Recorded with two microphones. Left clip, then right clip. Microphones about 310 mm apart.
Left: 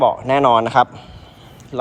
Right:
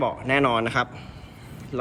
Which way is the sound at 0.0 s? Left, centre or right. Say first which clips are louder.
Left 8 dB; centre.